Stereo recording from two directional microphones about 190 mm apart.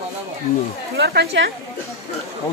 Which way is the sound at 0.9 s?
60° right (ahead or behind).